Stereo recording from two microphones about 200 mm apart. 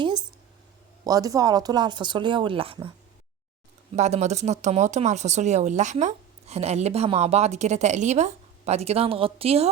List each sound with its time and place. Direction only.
0.0 s a sound: 20° right (ahead or behind)
1.0 s speech: 20° right (ahead or behind)
3.9 s speech: 35° right (ahead or behind)